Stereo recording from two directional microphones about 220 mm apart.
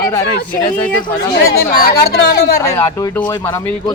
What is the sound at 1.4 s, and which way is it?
Speech, 40° left (ahead or behind).